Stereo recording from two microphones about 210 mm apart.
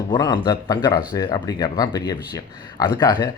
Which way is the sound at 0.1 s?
20° left (ahead or behind).